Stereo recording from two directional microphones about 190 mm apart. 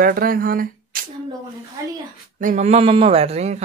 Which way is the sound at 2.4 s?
40° right (ahead or behind).